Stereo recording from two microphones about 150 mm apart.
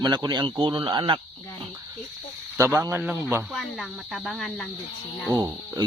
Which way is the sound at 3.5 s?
Centre (ahead or behind).